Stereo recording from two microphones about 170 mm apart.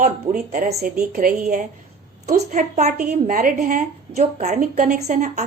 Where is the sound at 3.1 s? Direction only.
55° right (ahead or behind).